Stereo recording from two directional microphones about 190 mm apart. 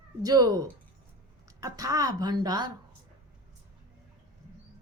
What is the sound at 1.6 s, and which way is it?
A woman's voice, 20° right (ahead or behind).